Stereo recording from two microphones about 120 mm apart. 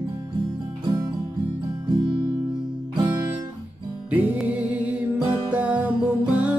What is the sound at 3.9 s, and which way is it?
Music, 10° right (ahead or behind).